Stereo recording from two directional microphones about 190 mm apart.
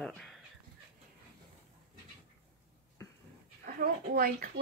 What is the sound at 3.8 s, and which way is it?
Speech, 50° right (ahead or behind).